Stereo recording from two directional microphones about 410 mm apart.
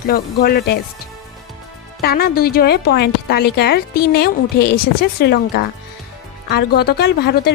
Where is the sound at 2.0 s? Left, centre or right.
Left.